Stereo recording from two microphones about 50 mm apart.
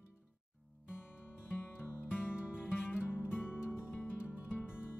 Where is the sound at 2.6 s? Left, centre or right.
Left.